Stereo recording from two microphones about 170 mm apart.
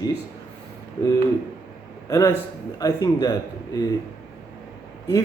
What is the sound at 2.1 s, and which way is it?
A man's voice, 20° left (ahead or behind).